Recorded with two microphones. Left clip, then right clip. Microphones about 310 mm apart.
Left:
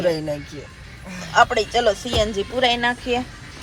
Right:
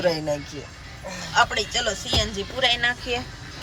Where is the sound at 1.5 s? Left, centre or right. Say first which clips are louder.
Left 6 dB; centre.